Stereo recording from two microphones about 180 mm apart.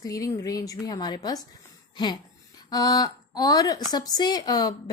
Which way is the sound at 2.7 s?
20° left (ahead or behind).